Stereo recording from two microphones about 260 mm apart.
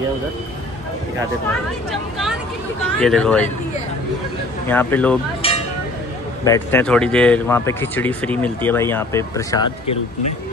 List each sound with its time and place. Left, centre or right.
3.0 s speech: centre
4.6 s speech: centre
5.4 s a sound: left
6.4 s speech: centre